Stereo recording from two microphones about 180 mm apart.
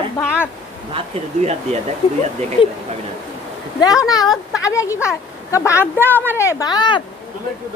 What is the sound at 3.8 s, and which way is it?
Speech, 20° left (ahead or behind).